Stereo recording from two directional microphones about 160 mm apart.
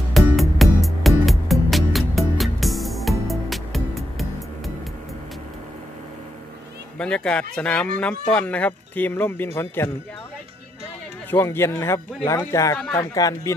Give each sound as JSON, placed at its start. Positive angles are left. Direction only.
{"t": 0.1, "sound": "music", "side_deg": 0}
{"t": 7.0, "sound": "speech", "side_deg": 5}
{"t": 11.2, "sound": "speech", "side_deg": 15}